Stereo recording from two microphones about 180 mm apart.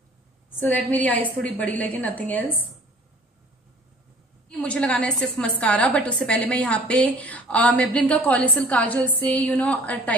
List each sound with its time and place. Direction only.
0.7 s a woman's voice: 10° left (ahead or behind)
4.5 s a woman's voice: 5° left (ahead or behind)